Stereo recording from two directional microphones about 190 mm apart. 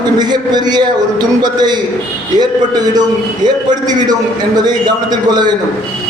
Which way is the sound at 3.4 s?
20° right (ahead or behind).